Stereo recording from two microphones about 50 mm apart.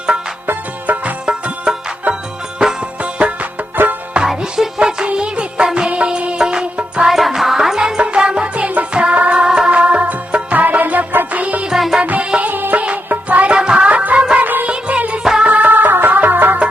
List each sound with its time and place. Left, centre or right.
0.4 s music: right
1.3 s music: right
4.2 s music: centre
7.1 s music: centre; by 11.7 s right
11.7 s music: centre
12.0 s music: right
12.5 s music: right
13.2 s music: right
15.2 s music: centre
15.4 s music: right